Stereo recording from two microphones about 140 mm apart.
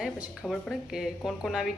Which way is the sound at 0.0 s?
Centre (ahead or behind).